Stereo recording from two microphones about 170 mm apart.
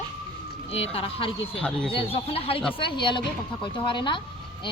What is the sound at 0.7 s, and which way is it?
Speech, 35° left (ahead or behind).